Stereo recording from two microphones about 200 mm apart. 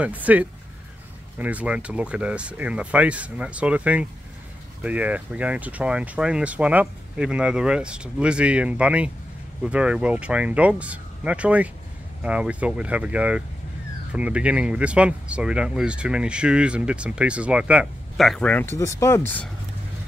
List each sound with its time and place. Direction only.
0.0 s speech: 10° right (ahead or behind); by 19.5 s 10° left (ahead or behind)